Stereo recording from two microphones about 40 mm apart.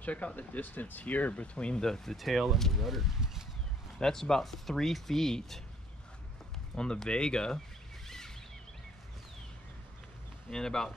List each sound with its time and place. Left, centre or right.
0.0 s speech: left
0.4 s speech: left
1.3 s speech: left
1.9 s speech: centre
2.1 s speech: centre
4.0 s speech: centre
6.7 s speech: centre
10.5 s speech: centre